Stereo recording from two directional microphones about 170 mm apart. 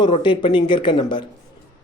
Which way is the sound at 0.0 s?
30° left (ahead or behind).